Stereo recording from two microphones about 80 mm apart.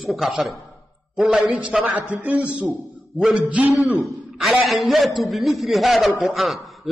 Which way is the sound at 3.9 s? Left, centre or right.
Centre.